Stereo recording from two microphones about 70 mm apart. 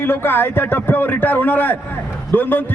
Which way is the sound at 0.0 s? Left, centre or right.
Left.